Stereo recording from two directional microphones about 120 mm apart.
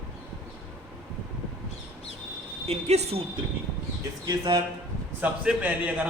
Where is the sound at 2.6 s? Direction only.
65° right (ahead or behind).